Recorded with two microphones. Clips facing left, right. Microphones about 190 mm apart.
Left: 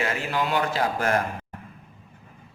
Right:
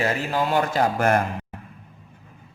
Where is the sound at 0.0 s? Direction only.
40° right (ahead or behind).